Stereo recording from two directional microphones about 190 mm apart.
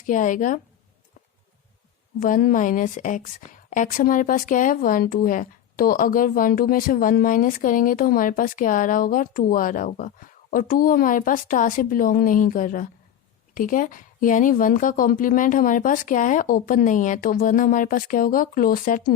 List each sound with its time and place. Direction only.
0.0 s a woman's voice: 45° left (ahead or behind)
2.2 s a woman's voice: 45° left (ahead or behind)